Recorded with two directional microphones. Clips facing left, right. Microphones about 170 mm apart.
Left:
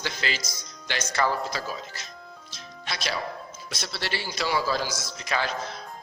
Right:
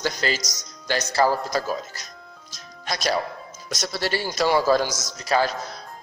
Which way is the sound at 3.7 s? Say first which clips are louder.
Right 7 dB; 45° right (ahead or behind).